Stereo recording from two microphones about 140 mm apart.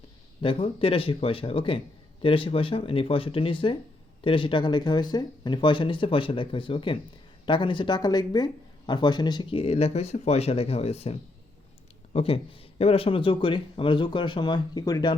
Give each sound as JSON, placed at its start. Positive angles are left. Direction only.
{"t": 0.4, "sound": "speech", "side_deg": 40}